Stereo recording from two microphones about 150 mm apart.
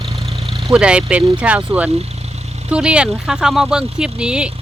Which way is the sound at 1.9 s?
45° right (ahead or behind).